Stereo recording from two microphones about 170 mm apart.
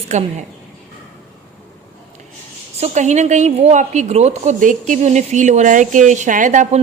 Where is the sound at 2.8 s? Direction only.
45° right (ahead or behind).